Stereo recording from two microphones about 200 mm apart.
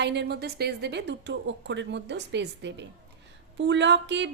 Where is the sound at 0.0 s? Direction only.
55° right (ahead or behind).